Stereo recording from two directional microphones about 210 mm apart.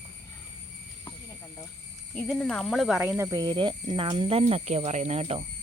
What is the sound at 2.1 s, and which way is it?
Speech, 5° left (ahead or behind).